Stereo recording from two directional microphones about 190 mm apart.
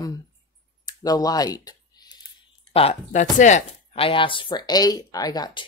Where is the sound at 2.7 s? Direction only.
30° left (ahead or behind).